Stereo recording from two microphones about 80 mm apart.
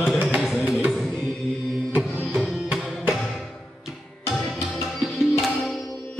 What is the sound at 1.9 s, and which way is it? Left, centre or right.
Music, right.